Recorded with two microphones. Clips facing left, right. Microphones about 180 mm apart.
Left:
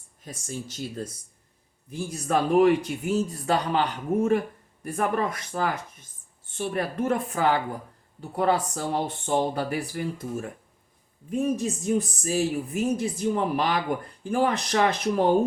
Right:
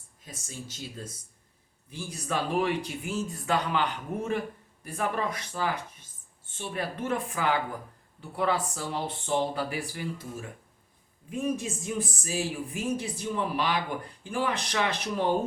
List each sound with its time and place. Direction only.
1.9 s speech: 45° left (ahead or behind)